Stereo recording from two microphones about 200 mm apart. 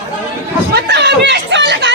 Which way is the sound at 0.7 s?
60° right (ahead or behind).